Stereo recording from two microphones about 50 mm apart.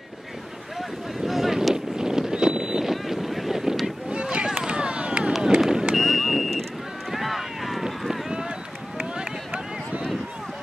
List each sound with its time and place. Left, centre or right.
0.7 s boat: centre
2.0 s boat: centre
4.1 s run: right
5.6 s vehicle: centre
7.1 s run: centre; by 10.0 s right